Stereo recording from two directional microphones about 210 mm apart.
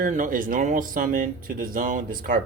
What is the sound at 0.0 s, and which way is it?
Speech, 40° right (ahead or behind).